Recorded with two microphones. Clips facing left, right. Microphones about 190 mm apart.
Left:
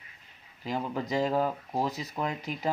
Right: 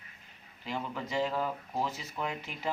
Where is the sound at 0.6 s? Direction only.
40° left (ahead or behind).